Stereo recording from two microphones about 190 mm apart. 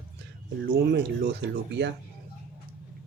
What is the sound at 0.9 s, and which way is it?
Speech, 65° right (ahead or behind).